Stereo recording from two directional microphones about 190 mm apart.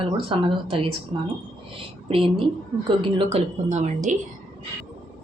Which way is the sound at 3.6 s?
40° right (ahead or behind).